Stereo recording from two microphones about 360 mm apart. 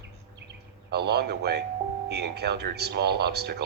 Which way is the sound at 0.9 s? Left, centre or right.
Right.